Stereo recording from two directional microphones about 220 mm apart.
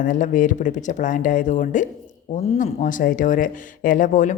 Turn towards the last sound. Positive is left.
turn(degrees=35)  # may be behind; listen again after turning